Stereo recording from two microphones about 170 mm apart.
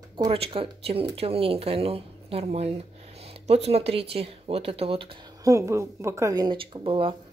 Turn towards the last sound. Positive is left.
turn(degrees=-30)  # may be behind; listen again after turning